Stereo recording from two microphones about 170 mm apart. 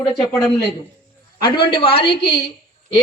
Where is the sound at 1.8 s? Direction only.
30° left (ahead or behind).